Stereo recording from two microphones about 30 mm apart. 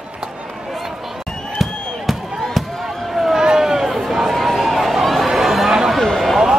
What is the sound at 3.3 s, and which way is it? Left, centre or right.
Run, right.